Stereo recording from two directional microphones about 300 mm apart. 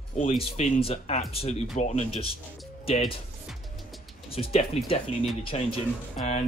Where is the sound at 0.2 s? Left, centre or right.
Left.